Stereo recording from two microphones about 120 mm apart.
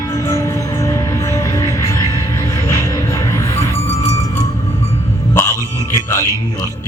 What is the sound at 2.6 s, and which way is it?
Music, 30° left (ahead or behind).